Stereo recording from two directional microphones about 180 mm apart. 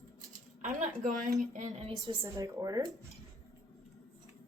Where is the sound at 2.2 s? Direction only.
20° right (ahead or behind).